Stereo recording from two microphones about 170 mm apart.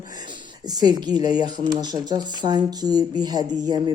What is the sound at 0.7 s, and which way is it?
Speech, 25° right (ahead or behind).